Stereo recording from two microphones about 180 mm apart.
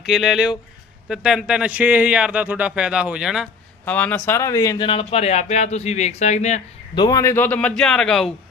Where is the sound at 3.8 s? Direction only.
10° left (ahead or behind); by 6.6 s 40° left (ahead or behind).